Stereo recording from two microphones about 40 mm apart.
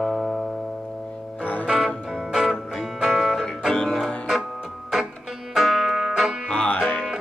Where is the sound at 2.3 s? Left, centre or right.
Centre.